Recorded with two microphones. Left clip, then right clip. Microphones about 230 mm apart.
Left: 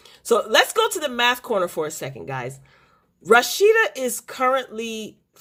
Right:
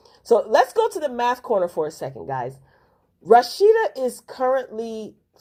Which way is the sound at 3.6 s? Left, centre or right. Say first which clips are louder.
Even; left.